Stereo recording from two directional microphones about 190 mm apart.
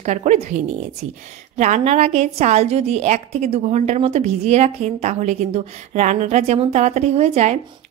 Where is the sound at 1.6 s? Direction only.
35° right (ahead or behind).